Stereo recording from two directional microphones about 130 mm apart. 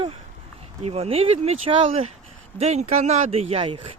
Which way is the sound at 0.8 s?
50° right (ahead or behind).